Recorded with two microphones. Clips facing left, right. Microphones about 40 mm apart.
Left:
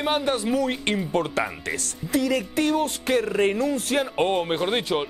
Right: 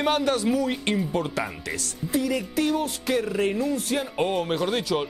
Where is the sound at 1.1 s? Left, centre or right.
Left.